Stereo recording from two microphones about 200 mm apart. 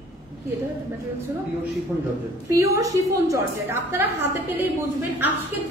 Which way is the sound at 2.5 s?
15° right (ahead or behind).